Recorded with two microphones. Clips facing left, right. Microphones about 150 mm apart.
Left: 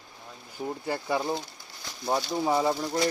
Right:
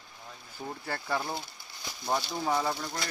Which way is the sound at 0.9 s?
15° left (ahead or behind).